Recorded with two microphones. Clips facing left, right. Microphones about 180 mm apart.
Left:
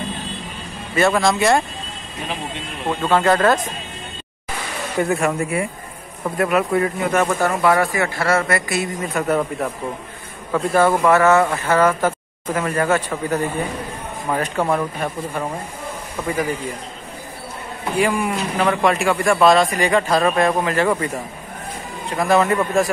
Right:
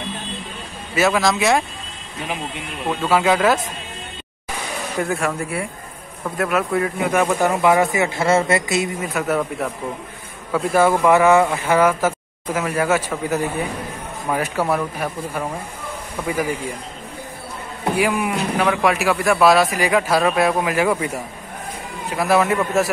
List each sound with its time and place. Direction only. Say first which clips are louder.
0.9 s speech: left 1 dB; centre (ahead or behind)
2.9 s speech: left 1 dB; 5° right (ahead or behind)
4.9 s speech: left 3 dB; 5° left (ahead or behind); by 8.9 s 20° right (ahead or behind)
9.0 s speech: left 1 dB; centre (ahead or behind)
17.9 s speech: left 1 dB; 5° right (ahead or behind)